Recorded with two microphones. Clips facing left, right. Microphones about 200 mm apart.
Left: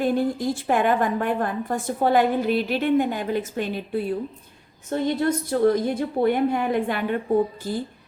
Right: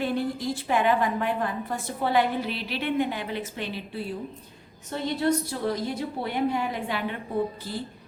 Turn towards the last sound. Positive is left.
turn(degrees=45)  # may be behind; listen again after turning